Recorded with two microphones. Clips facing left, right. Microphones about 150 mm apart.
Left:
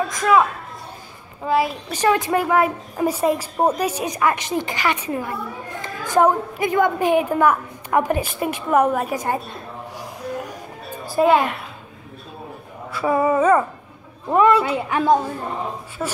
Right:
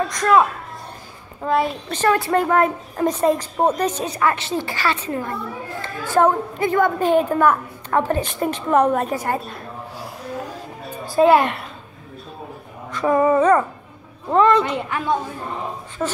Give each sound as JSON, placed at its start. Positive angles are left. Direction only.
{"t": 0.1, "sound": "a woman's voice", "side_deg": 5}
{"t": 9.1, "sound": "a sound", "side_deg": 15}
{"t": 11.2, "sound": "a woman's voice", "side_deg": 0}
{"t": 12.9, "sound": "a woman's voice", "side_deg": 10}